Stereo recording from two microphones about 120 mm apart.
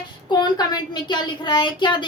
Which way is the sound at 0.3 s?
35° left (ahead or behind).